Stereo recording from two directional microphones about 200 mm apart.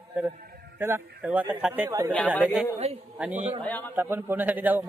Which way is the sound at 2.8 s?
30° right (ahead or behind).